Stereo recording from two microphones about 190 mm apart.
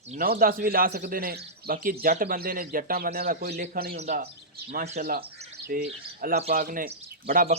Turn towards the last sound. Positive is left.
turn(degrees=-55)  # may be behind; listen again after turning